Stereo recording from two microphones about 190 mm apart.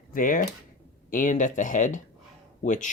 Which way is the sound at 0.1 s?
45° left (ahead or behind).